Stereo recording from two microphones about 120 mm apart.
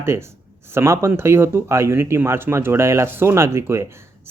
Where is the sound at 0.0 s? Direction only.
20° right (ahead or behind).